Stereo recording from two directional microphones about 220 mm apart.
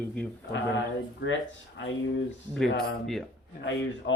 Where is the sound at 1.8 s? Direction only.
55° left (ahead or behind).